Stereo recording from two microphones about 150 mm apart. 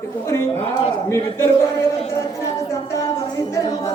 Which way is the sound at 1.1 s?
20° left (ahead or behind).